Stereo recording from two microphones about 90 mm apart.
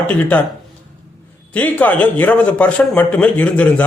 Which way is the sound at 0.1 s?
15° left (ahead or behind).